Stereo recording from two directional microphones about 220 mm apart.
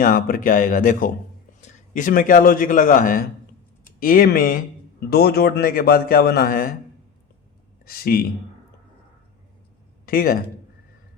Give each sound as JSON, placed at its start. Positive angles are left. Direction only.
{"t": 0.0, "sound": "speech", "side_deg": 40}
{"t": 7.9, "sound": "speech", "side_deg": 45}
{"t": 10.1, "sound": "speech", "side_deg": 40}